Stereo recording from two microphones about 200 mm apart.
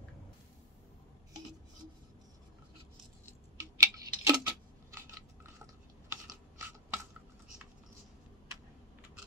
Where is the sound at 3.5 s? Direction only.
15° right (ahead or behind).